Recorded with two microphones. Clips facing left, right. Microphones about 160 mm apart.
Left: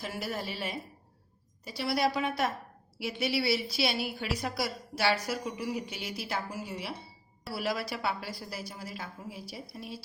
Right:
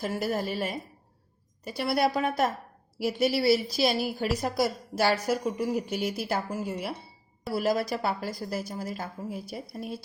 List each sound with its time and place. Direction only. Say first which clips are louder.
0.0 s a woman's voice: right 7 dB; 45° right (ahead or behind)